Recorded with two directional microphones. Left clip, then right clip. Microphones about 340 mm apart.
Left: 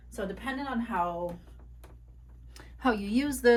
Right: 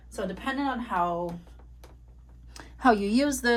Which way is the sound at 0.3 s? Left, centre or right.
Right.